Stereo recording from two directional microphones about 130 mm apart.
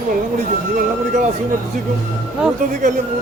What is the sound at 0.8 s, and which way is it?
Speech, 75° right (ahead or behind).